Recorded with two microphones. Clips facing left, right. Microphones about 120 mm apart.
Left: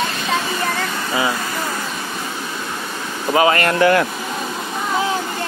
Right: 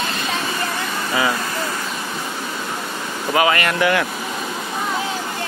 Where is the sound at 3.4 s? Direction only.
30° left (ahead or behind).